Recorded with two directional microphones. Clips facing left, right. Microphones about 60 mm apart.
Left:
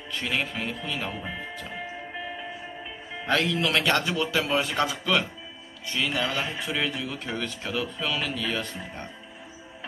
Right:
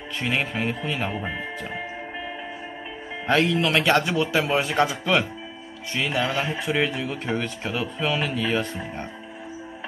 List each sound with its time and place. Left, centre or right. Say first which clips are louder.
0.1 s speech: right 3 dB; right
3.3 s speech: right 4 dB; centre